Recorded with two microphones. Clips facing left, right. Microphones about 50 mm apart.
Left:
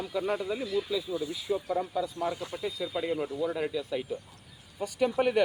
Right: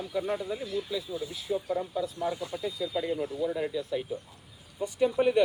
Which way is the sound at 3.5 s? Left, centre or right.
Left.